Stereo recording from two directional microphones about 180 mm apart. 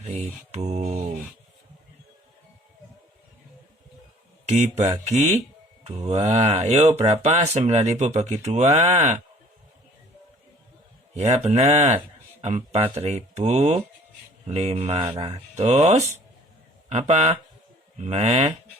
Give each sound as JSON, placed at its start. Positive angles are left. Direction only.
{"t": 0.1, "sound": "mantra", "side_deg": -35}
{"t": 4.4, "sound": "speech", "side_deg": -40}
{"t": 11.1, "sound": "speech", "side_deg": -40}